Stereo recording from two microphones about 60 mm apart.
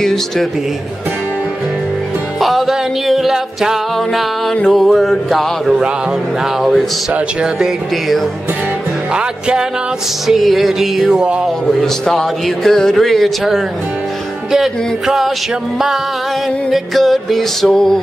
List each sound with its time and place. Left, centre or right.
0.0 s a man's voice: centre
2.4 s music: centre
4.6 s a man's voice: centre
5.7 s music: centre
6.6 s a man's voice: centre
7.2 s music: centre
9.1 s music: centre
10.2 s a man's voice: centre
11.6 s a man's voice: centre
16.7 s a man's voice: centre